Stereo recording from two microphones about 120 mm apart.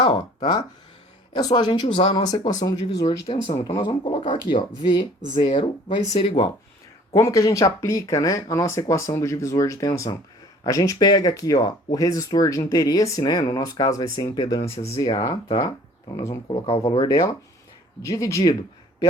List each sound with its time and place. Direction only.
0.0 s speech: 40° left (ahead or behind)
2.5 s speech: 30° left (ahead or behind)
2.8 s speech: 45° left (ahead or behind)
7.1 s speech: 25° left (ahead or behind)
16.6 s speech: 55° left (ahead or behind)
17.0 s speech: 30° left (ahead or behind)